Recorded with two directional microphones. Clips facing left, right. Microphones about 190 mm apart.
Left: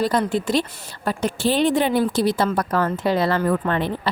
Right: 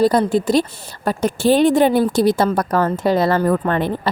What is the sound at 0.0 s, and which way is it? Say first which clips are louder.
A woman's voice: right 6 dB; 35° right (ahead or behind).